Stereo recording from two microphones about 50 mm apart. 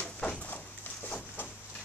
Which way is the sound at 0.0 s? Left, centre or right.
Left.